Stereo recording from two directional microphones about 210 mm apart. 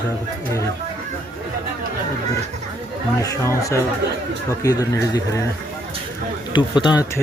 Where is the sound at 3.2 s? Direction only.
15° left (ahead or behind).